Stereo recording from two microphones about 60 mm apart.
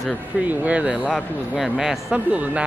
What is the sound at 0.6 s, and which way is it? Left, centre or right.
Speech, right.